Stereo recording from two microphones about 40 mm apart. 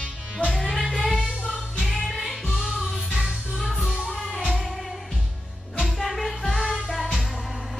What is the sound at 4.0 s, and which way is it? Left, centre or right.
Music, centre.